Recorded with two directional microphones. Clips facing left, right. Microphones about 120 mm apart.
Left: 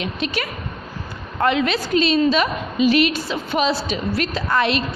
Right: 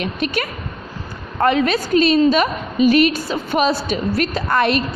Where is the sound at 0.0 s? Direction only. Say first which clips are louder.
Right 3 dB; 50° right (ahead or behind).